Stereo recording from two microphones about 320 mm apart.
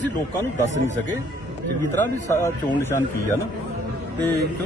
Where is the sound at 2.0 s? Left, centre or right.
Centre.